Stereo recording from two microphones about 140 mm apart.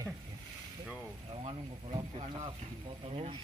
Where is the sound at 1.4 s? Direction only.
45° right (ahead or behind).